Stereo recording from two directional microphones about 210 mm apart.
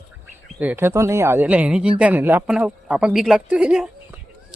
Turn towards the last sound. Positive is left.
turn(degrees=-5)  # may be behind; listen again after turning